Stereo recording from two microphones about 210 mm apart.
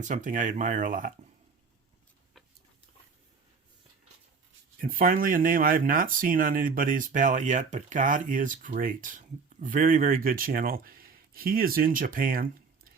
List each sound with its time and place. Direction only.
0.0 s speech: 40° right (ahead or behind)
4.8 s speech: 45° right (ahead or behind)